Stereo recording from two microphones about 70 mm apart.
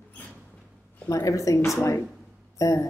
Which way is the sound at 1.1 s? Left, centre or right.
Left.